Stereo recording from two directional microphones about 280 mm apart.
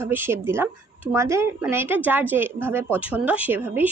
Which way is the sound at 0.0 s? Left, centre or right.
Centre.